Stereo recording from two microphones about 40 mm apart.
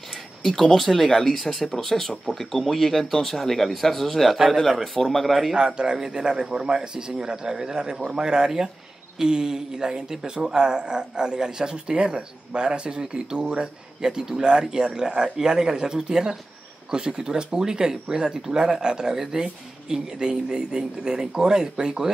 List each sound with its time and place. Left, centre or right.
0.4 s speech: centre
1.0 s speech: centre
5.6 s speech: right